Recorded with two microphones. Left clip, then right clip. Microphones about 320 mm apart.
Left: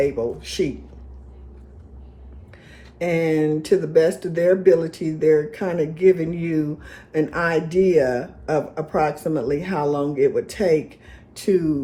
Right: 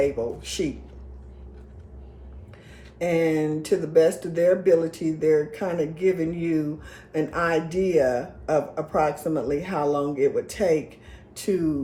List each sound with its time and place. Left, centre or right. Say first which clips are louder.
0.0 s speech: left 3 dB; left
3.0 s speech: left 2 dB; left